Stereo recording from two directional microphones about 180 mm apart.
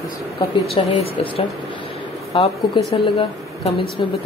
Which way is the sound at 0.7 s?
30° left (ahead or behind).